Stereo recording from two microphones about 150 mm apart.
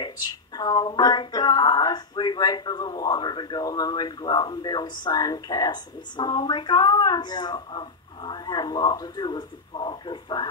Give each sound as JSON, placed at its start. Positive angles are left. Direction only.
{"t": 0.6, "sound": "speech", "side_deg": 30}